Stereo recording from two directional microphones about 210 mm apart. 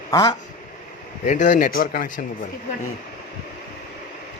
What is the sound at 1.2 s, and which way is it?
Speech, 35° left (ahead or behind).